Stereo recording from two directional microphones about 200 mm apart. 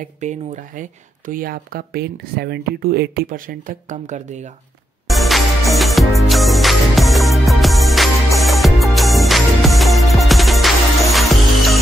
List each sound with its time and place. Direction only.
0.2 s speech: 40° right (ahead or behind)
5.0 s music: centre (ahead or behind)